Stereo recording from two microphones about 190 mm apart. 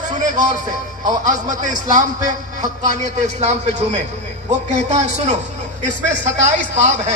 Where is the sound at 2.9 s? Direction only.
40° right (ahead or behind).